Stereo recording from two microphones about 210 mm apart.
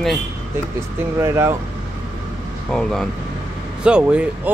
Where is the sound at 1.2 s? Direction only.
10° right (ahead or behind).